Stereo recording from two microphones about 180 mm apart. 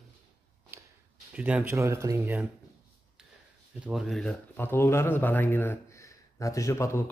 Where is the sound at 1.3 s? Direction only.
10° right (ahead or behind).